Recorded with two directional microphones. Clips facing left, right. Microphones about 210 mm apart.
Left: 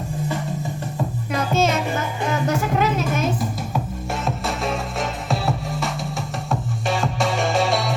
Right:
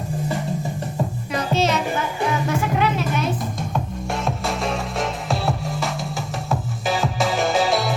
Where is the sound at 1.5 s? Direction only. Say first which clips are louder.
Left 1 dB; 50° left (ahead or behind).